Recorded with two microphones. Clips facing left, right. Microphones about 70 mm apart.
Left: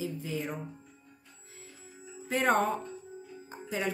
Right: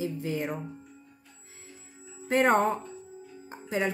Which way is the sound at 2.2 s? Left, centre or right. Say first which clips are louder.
Right 4 dB; right.